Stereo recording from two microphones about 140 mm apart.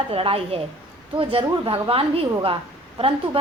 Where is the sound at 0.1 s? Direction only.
40° right (ahead or behind).